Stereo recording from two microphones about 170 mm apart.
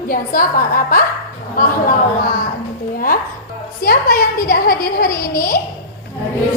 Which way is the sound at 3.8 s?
60° left (ahead or behind).